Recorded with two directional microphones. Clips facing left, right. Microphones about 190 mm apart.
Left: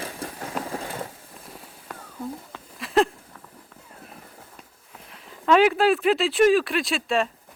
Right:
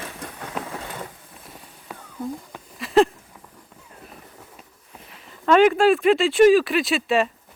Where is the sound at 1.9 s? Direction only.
5° right (ahead or behind).